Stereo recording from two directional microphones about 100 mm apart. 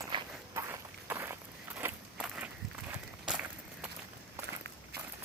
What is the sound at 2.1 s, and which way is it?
Walk, 10° right (ahead or behind).